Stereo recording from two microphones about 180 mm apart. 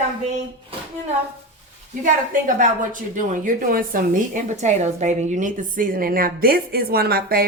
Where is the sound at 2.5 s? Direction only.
50° right (ahead or behind).